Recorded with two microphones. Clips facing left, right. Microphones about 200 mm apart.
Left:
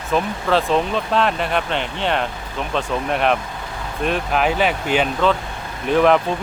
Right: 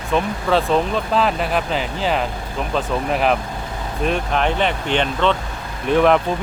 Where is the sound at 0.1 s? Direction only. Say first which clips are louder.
Even; centre (ahead or behind).